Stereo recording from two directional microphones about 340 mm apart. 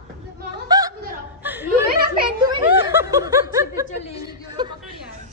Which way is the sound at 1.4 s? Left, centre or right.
Centre.